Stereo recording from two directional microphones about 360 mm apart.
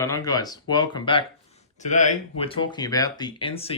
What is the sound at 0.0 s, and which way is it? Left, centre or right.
Speech, centre.